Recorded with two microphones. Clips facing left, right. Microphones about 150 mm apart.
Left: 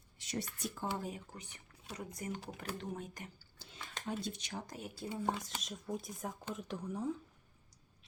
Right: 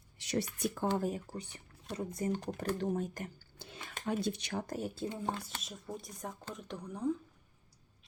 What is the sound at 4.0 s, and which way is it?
Speech, 65° right (ahead or behind).